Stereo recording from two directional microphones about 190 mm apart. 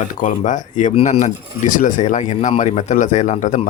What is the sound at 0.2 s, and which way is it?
Speech, 40° left (ahead or behind).